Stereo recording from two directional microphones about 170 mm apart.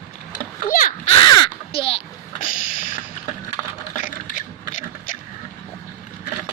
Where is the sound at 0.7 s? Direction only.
50° left (ahead or behind).